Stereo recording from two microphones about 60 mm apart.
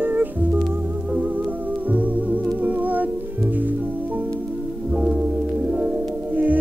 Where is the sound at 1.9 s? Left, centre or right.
Right.